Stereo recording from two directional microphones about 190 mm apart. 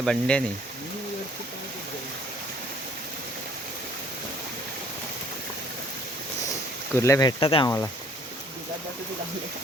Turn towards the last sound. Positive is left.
turn(degrees=25)  # may be behind; listen again after turning